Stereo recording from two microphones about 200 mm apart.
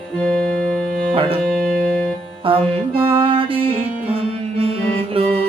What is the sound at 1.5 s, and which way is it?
Music, 5° left (ahead or behind).